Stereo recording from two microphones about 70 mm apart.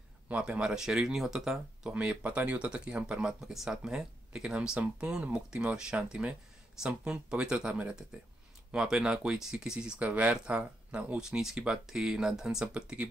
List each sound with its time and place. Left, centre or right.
0.3 s speech: centre